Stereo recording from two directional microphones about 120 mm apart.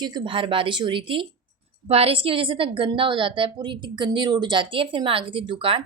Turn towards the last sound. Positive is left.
turn(degrees=-50)  # may be behind; listen again after turning